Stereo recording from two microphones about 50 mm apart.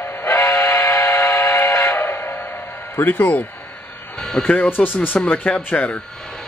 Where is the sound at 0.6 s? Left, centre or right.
Left.